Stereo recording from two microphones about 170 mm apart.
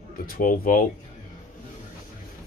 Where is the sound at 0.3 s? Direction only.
55° left (ahead or behind).